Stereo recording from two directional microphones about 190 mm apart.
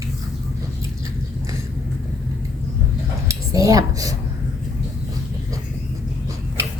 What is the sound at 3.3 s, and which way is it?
Cutlery, 15° right (ahead or behind).